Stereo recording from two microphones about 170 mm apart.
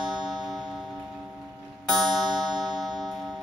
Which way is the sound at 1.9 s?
Centre (ahead or behind).